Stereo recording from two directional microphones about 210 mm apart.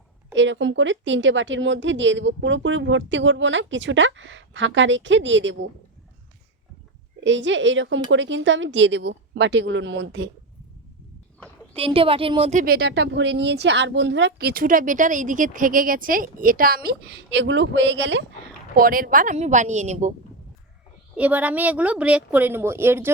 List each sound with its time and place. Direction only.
0.3 s speech: 60° right (ahead or behind)
7.2 s speech: 60° right (ahead or behind)
11.3 s a sound: 5° left (ahead or behind)
11.8 s a woman's voice: 25° right (ahead or behind); by 18.3 s 60° right (ahead or behind)
18.8 s a woman's voice: 45° right (ahead or behind)
21.2 s a woman's voice: 5° right (ahead or behind)